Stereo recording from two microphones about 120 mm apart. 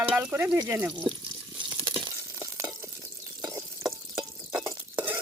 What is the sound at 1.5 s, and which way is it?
Water, 35° right (ahead or behind).